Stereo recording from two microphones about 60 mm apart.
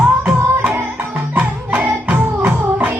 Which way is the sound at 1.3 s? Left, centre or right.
Right.